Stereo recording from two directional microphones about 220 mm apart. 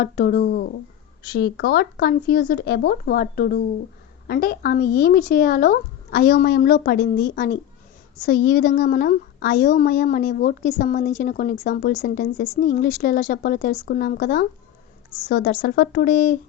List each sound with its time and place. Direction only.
0.0 s a woman's voice: 40° left (ahead or behind)